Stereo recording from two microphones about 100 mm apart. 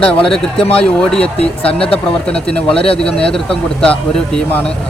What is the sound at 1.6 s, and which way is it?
Speech, 70° left (ahead or behind).